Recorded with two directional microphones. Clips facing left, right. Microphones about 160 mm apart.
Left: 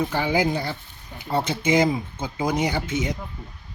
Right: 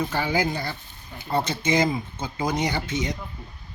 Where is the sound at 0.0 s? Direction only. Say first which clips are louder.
Left 2 dB; 10° left (ahead or behind).